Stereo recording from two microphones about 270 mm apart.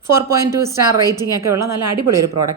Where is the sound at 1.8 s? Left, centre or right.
Right.